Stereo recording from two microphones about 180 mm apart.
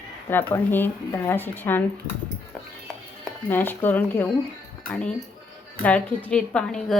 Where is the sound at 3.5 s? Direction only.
10° left (ahead or behind).